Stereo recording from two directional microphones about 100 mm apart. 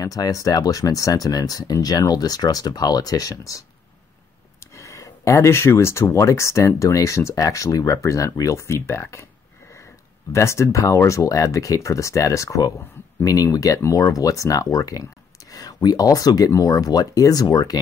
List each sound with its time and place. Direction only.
0.0 s speech: 35° left (ahead or behind)
4.7 s a sound: 30° left (ahead or behind)
6.0 s speech: 30° left (ahead or behind)
10.3 s speech: 30° left (ahead or behind)